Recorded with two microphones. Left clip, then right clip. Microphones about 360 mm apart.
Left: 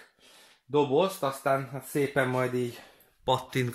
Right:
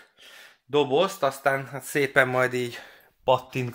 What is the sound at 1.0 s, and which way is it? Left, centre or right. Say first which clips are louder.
Speech: right 3 dB; right.